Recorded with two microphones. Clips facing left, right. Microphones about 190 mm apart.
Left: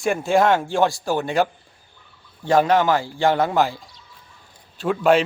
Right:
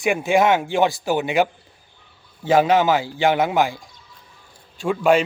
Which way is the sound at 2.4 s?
5° right (ahead or behind).